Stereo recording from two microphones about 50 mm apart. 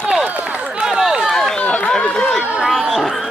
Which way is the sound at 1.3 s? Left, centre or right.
Centre.